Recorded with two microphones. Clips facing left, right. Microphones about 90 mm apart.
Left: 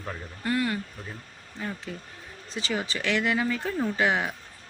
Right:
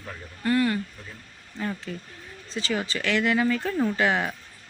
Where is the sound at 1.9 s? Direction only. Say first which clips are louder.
Right 2 dB; 15° left (ahead or behind).